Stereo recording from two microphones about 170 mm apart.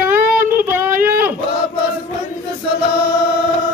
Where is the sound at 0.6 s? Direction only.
10° right (ahead or behind).